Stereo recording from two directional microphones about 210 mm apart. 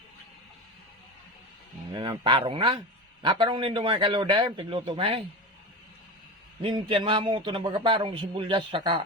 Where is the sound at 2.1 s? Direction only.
20° right (ahead or behind).